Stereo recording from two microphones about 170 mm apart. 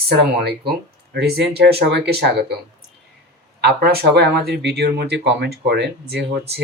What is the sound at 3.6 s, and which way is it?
Speech, 70° right (ahead or behind).